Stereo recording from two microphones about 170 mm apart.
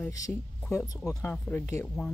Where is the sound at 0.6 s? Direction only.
10° left (ahead or behind).